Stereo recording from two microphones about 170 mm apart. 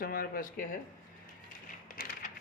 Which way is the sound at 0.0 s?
55° left (ahead or behind).